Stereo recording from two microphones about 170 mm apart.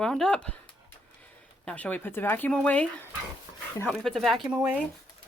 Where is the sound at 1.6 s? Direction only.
10° left (ahead or behind); by 4.8 s 5° right (ahead or behind).